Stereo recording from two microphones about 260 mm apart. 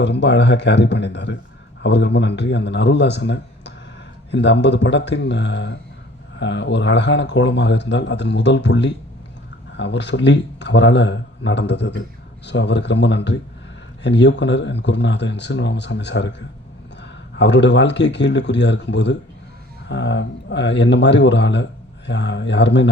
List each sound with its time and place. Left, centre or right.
0.0 s speech: left